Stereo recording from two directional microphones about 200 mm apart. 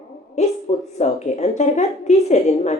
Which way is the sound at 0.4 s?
35° left (ahead or behind).